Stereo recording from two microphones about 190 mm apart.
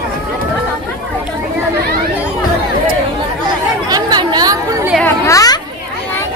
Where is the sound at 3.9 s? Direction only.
20° right (ahead or behind).